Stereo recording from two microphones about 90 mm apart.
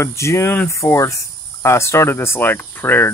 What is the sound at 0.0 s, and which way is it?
Speech, 30° left (ahead or behind).